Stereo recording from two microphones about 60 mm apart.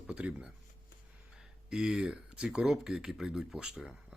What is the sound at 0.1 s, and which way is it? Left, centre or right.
Speech, centre.